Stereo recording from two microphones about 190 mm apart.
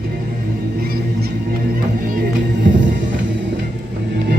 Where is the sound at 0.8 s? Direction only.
55° right (ahead or behind).